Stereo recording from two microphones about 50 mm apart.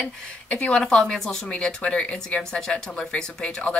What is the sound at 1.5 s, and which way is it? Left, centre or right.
Speech, left.